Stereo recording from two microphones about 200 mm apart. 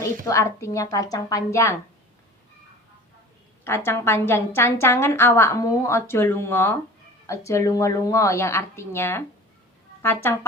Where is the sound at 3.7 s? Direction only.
10° left (ahead or behind).